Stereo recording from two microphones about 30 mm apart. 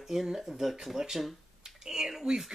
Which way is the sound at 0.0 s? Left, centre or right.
Centre.